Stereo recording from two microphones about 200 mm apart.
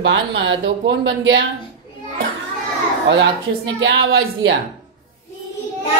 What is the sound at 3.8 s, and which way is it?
Speech, 80° right.